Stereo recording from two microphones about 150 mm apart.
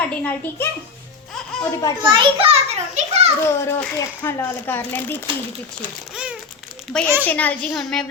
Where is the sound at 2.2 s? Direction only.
40° right (ahead or behind).